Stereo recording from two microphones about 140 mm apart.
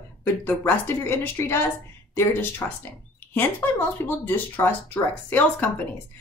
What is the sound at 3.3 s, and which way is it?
A woman's voice, 15° left (ahead or behind).